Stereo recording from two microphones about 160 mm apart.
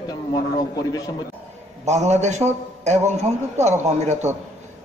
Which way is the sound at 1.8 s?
45° right (ahead or behind).